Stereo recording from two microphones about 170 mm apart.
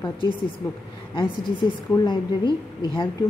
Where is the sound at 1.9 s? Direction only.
25° left (ahead or behind).